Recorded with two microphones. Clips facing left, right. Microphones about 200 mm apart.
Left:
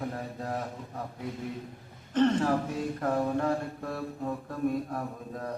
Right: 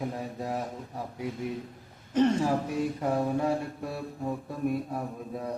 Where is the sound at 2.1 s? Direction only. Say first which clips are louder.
Even; 10° right (ahead or behind).